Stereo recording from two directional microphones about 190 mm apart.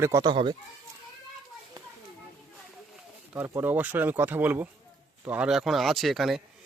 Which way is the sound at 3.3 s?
10° right (ahead or behind).